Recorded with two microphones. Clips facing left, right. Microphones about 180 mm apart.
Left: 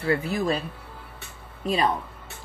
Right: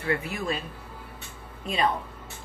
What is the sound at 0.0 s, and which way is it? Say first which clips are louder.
Speech: left 5 dB; 35° left (ahead or behind).